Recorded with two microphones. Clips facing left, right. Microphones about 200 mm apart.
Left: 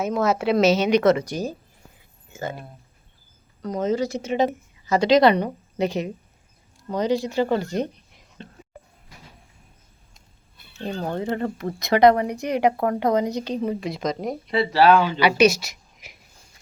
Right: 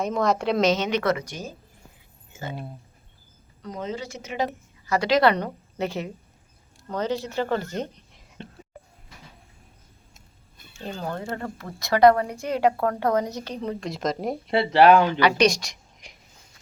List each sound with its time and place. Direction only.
0.0 s a woman's voice: 5° left (ahead or behind)
1.0 s speech: 30° left (ahead or behind)
2.3 s speech: 45° left (ahead or behind)
3.6 s a woman's voice: 45° left (ahead or behind)
4.2 s a woman's voice: 25° left (ahead or behind)
10.8 s speech: 20° left (ahead or behind); by 14.5 s centre (ahead or behind)
14.5 s speech: 25° right (ahead or behind)
15.2 s a woman's voice: 10° left (ahead or behind)